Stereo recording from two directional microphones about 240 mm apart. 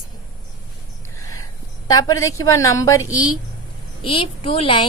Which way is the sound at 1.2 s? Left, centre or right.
Centre.